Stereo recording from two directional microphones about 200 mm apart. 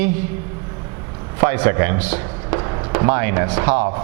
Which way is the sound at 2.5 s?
20° right (ahead or behind).